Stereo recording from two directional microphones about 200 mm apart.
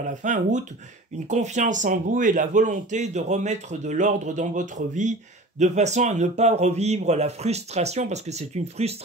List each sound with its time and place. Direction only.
0.1 s a man's voice: 40° right (ahead or behind)